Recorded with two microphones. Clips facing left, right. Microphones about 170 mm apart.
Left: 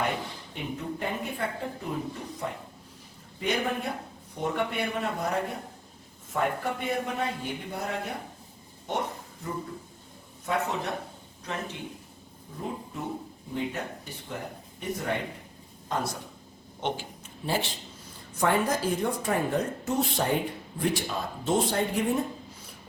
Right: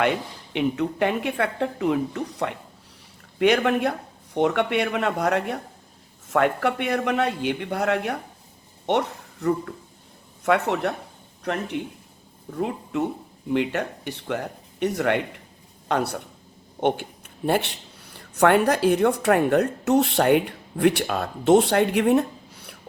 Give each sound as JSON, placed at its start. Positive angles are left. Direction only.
{"t": 0.5, "sound": "a woman's voice", "side_deg": -80}
{"t": 12.5, "sound": "a woman's voice", "side_deg": -80}
{"t": 16.8, "sound": "speech", "side_deg": -55}